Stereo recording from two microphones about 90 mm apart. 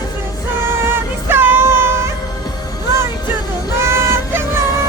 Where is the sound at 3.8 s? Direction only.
30° right (ahead or behind).